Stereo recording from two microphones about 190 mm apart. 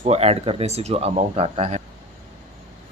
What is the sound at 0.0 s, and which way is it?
Speech, 35° right (ahead or behind).